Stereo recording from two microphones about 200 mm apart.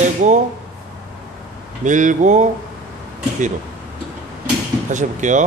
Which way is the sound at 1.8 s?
40° right (ahead or behind).